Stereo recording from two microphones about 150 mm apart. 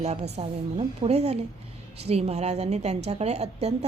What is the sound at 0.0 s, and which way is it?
A woman's voice, 45° right (ahead or behind).